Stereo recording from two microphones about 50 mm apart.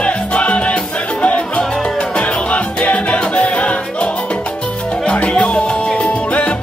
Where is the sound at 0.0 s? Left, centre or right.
Left.